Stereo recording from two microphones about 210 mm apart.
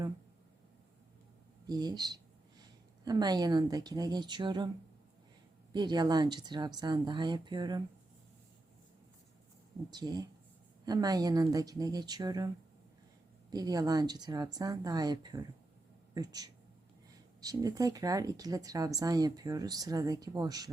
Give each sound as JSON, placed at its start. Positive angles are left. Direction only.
{"t": 1.6, "sound": "speech", "side_deg": -20}
{"t": 5.7, "sound": "speech", "side_deg": -20}
{"t": 9.9, "sound": "speech", "side_deg": -20}
{"t": 13.5, "sound": "speech", "side_deg": -20}